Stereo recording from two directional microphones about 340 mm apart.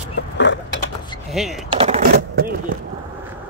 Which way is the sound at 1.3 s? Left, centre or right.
Centre.